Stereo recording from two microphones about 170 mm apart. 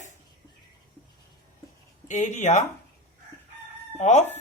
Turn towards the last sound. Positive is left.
turn(degrees=40)  # may be behind; listen again after turning